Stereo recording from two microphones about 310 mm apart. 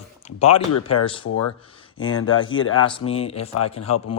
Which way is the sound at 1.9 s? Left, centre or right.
Left.